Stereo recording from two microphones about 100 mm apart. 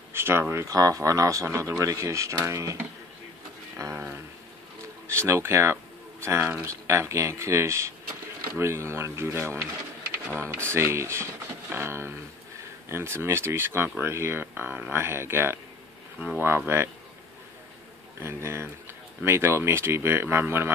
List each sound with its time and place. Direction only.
0.1 s speech: 25° right (ahead or behind)
3.7 s a sound: 25° right (ahead or behind)
5.0 s speech: 25° right (ahead or behind)
18.2 s speech: 25° right (ahead or behind)